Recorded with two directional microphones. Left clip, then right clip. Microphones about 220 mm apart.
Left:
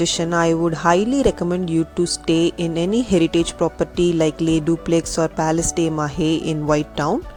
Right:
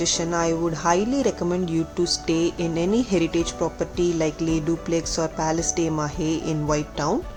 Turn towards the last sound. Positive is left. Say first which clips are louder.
# left 5 dB
turn(degrees=35)  # may be behind; listen again after turning